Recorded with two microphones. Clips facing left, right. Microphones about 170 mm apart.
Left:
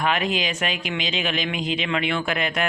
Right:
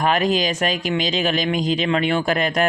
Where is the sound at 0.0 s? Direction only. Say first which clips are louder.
Right 5 dB; 40° right (ahead or behind).